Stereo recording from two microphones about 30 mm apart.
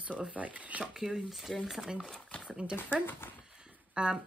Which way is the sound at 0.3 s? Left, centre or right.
Right.